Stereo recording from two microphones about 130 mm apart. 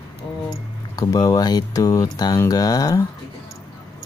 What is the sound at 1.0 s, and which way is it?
Speech, 30° left (ahead or behind).